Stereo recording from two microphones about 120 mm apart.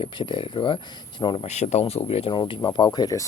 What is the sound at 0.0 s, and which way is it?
Speech, 40° left (ahead or behind).